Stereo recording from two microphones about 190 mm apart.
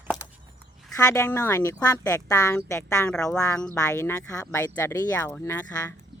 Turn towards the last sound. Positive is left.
turn(degrees=15)  # may be behind; listen again after turning